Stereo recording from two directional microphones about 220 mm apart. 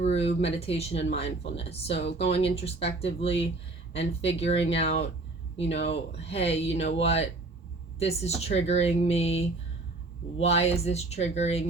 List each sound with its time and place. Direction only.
0.0 s speech: 30° left (ahead or behind)
2.0 s speech: 50° left (ahead or behind)
2.3 s speech: 25° left (ahead or behind)